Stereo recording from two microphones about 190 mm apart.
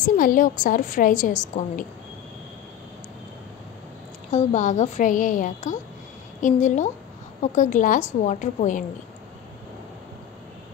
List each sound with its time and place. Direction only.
0.0 s a woman's voice: 45° left (ahead or behind)
4.3 s a woman's voice: 40° left (ahead or behind)